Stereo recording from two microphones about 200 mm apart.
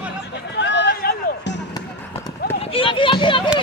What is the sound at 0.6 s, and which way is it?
Music, 60° left (ahead or behind).